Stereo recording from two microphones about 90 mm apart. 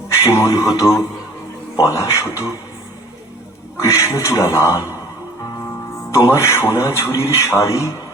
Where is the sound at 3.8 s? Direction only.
35° left (ahead or behind).